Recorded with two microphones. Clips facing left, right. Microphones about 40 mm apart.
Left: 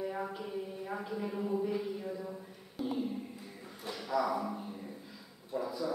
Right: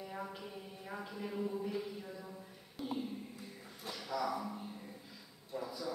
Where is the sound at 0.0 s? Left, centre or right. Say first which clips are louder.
Left 7 dB; left.